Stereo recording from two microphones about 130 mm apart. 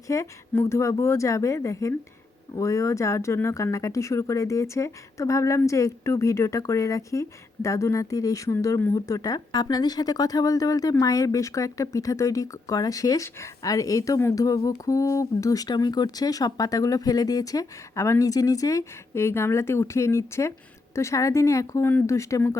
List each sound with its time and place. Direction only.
0.1 s speech: 20° left (ahead or behind)